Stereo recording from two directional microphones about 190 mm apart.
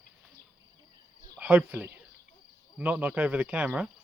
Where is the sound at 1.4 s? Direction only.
10° right (ahead or behind).